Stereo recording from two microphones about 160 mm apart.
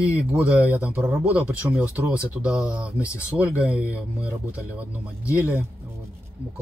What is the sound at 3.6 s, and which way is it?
Speech, 10° right (ahead or behind).